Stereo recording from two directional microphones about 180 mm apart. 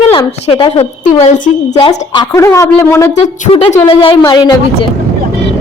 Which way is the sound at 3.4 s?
35° left (ahead or behind).